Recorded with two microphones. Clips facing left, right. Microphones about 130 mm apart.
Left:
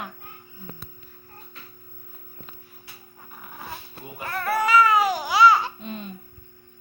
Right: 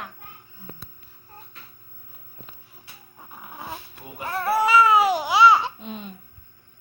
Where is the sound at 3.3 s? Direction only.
20° right (ahead or behind).